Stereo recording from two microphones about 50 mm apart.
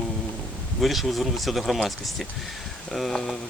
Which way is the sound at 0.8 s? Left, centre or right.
Centre.